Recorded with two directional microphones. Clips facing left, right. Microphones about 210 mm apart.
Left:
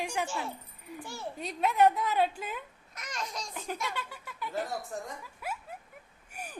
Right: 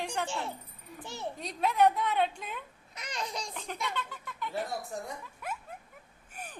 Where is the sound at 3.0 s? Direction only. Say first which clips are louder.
Right 1 dB; 30° right (ahead or behind).